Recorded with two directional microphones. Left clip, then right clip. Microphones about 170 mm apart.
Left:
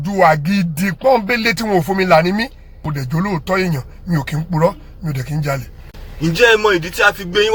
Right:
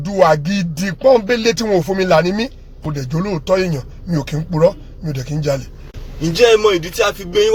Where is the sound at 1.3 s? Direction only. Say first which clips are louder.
Right 1 dB; centre (ahead or behind).